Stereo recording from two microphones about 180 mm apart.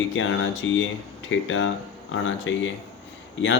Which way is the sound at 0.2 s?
90° left.